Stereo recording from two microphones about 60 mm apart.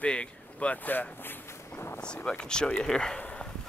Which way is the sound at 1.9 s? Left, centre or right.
Centre.